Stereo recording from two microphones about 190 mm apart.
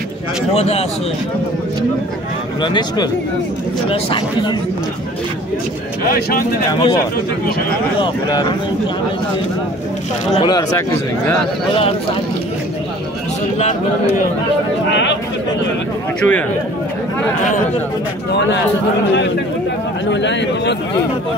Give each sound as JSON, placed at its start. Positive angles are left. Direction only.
{"t": 0.6, "sound": "speech", "side_deg": 35}
{"t": 2.6, "sound": "speech", "side_deg": 25}
{"t": 6.0, "sound": "speech", "side_deg": 50}
{"t": 6.7, "sound": "speech", "side_deg": 25}
{"t": 8.0, "sound": "speech", "side_deg": 25}
{"t": 10.3, "sound": "speech", "side_deg": 20}
{"t": 14.9, "sound": "a man's voice", "side_deg": 70}
{"t": 16.2, "sound": "a man's voice", "side_deg": 5}
{"t": 20.1, "sound": "a man's voice", "side_deg": 70}